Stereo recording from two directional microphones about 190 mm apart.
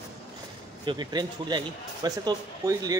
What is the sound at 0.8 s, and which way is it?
A man's voice, 25° right (ahead or behind).